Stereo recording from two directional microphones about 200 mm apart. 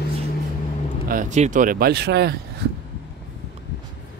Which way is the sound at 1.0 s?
40° right (ahead or behind).